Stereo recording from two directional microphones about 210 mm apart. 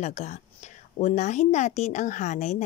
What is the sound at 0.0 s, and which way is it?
A woman's voice, 35° left (ahead or behind).